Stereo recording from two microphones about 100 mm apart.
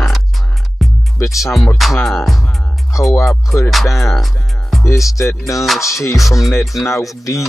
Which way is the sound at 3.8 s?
30° left (ahead or behind).